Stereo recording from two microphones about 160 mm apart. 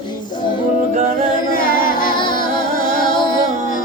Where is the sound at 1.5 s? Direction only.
60° left (ahead or behind).